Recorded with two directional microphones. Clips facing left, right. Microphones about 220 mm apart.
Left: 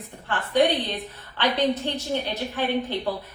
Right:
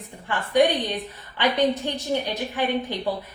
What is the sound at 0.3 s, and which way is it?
A woman's voice, 10° right (ahead or behind).